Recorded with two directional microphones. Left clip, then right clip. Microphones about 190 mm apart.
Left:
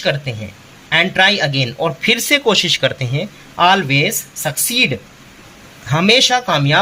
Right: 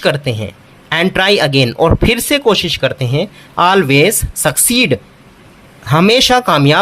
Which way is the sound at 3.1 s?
30° right (ahead or behind).